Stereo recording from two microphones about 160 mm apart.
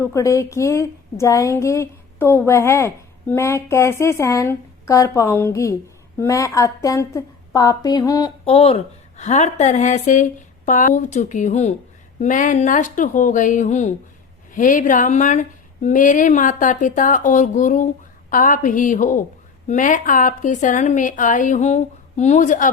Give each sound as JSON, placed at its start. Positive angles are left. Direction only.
{"t": 0.0, "sound": "a woman's voice", "side_deg": 20}
{"t": 8.4, "sound": "a woman's voice", "side_deg": 40}